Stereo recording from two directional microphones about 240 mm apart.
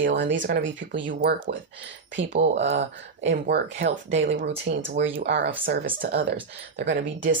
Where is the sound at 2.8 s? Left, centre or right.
Right.